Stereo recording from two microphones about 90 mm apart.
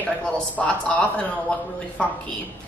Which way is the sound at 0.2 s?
15° left (ahead or behind).